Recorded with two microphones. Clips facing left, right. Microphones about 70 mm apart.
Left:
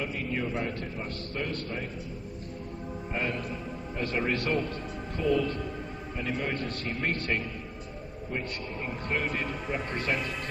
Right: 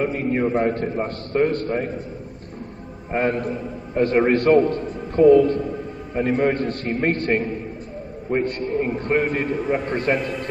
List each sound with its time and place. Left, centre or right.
0.0 s a man's voice: right
3.1 s a man's voice: right